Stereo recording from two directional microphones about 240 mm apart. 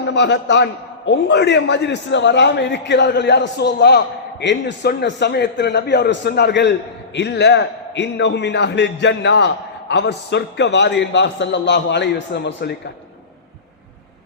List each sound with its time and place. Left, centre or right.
0.1 s a man's voice: left